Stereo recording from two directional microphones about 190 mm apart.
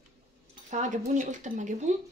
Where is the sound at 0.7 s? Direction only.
40° right (ahead or behind).